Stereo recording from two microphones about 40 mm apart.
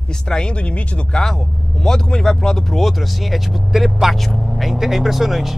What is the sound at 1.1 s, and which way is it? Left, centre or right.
Speech, centre.